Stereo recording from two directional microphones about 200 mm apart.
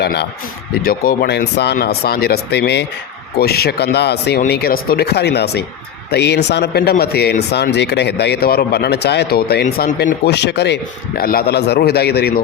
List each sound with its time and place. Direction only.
0.0 s a man's voice: 55° left (ahead or behind)